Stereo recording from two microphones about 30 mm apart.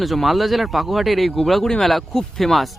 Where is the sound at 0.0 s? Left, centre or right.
Centre.